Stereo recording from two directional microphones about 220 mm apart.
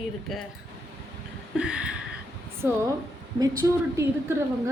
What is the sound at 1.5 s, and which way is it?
A woman's voice, 5° right (ahead or behind).